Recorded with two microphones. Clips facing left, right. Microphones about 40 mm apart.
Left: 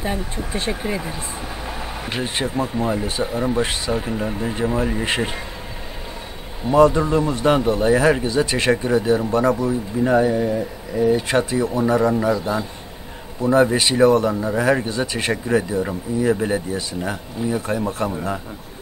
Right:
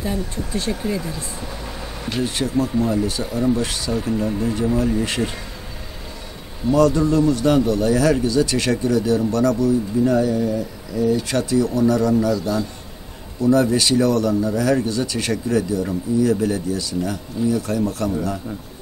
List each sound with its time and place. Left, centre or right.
0.0 s a man's voice: left
6.6 s a man's voice: left